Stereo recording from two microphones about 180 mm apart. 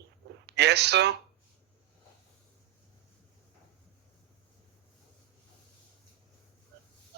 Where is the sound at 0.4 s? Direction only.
70° right (ahead or behind).